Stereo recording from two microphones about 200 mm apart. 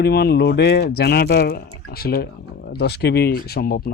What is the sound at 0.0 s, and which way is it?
Speech, 55° left (ahead or behind).